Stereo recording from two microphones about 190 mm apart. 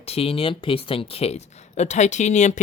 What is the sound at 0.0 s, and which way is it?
Speech, 30° left (ahead or behind).